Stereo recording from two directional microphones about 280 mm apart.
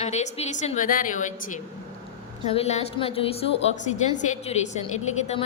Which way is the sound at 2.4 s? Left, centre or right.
Left.